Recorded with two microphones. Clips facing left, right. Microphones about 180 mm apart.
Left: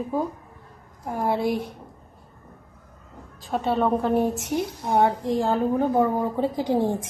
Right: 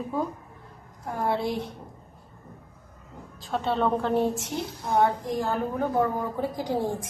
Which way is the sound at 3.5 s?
10° left (ahead or behind).